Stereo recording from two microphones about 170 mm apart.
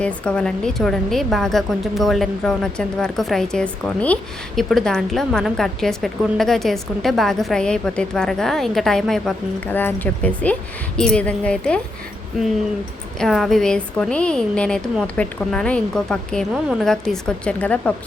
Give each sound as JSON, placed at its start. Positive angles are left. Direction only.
{"t": 0.0, "sound": "a woman's voice", "side_deg": 5}